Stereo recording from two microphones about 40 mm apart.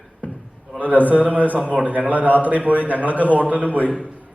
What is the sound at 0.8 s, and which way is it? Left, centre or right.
A man's voice, right.